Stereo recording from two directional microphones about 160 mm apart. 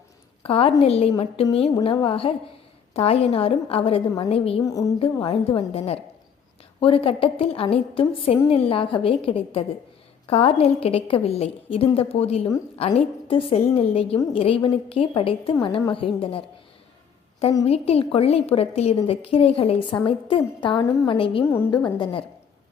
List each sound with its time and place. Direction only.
0.4 s a woman's voice: 35° left (ahead or behind)
4.6 s speech: 20° left (ahead or behind)
4.9 s a woman's voice: 35° left (ahead or behind)
17.7 s a woman's voice: 40° left (ahead or behind)
21.4 s a woman's voice: 15° left (ahead or behind)
21.9 s speech: 30° left (ahead or behind)